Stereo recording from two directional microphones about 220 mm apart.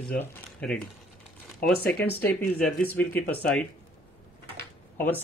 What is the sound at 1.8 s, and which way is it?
Speech, 45° left (ahead or behind).